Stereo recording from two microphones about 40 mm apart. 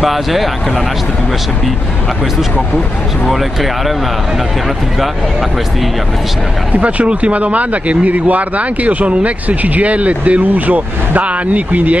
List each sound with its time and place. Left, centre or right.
0.0 s speech: centre
6.7 s speech: right